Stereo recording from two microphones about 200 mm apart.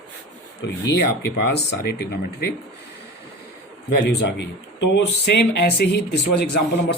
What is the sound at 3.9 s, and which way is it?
Speech, 60° left (ahead or behind).